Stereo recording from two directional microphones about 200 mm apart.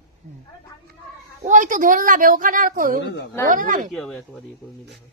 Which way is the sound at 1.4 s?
40° right (ahead or behind).